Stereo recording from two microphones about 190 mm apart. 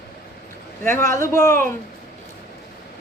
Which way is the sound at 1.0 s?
15° left (ahead or behind).